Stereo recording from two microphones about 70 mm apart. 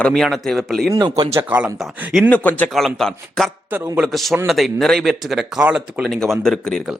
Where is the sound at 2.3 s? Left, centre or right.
Left.